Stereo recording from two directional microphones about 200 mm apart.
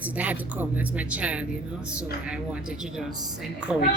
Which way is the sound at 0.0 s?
5° right (ahead or behind).